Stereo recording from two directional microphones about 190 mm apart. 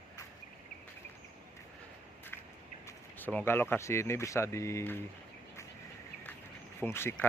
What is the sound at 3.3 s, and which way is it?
Speech, 10° left (ahead or behind).